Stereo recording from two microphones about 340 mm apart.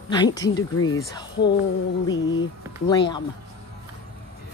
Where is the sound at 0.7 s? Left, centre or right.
Left.